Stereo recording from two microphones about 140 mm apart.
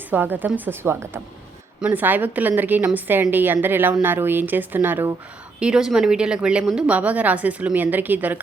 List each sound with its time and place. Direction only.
0.1 s a woman's voice: 15° right (ahead or behind)